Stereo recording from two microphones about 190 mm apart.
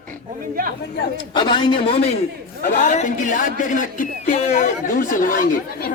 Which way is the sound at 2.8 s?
40° left (ahead or behind).